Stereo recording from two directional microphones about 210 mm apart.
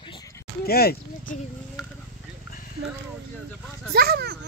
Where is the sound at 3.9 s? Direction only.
50° right (ahead or behind).